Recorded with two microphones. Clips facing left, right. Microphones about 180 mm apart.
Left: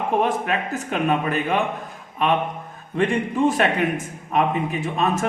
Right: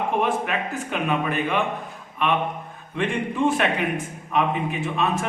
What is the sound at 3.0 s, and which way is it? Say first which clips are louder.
A man's voice: left 3 dB; 40° left (ahead or behind).